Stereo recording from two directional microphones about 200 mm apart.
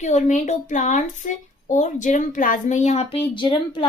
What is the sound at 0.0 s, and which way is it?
A woman's voice, 35° left (ahead or behind).